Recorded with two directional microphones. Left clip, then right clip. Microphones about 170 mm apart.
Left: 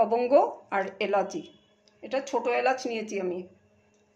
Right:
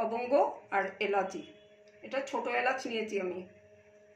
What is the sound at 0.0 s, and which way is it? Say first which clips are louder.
Speech: left 7 dB; 85° left.